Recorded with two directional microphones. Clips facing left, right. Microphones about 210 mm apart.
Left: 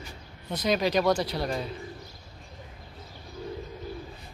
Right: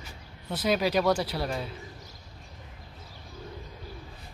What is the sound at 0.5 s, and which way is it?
Speech, 5° right (ahead or behind).